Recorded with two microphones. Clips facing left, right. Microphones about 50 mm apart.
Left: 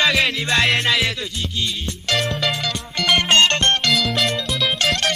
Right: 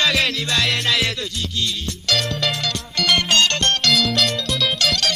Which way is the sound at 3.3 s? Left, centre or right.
Left.